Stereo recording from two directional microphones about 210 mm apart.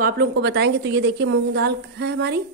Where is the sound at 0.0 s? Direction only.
50° right (ahead or behind).